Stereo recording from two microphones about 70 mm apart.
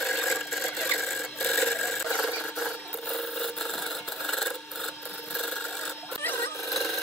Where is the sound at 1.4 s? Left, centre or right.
Centre.